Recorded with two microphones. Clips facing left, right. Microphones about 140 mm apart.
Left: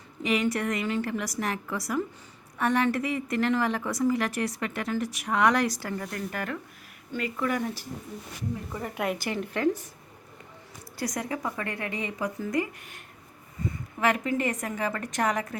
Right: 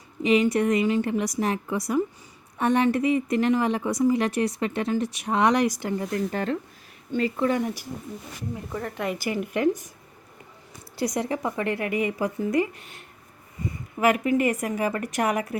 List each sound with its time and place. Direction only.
0.2 s a woman's voice: 20° right (ahead or behind)
8.7 s a woman's voice: 5° left (ahead or behind)
9.3 s a woman's voice: 15° right (ahead or behind)
10.9 s a woman's voice: 25° right (ahead or behind)
14.1 s a woman's voice: 15° right (ahead or behind)